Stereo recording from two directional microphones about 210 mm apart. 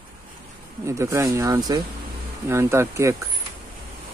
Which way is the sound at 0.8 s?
15° right (ahead or behind).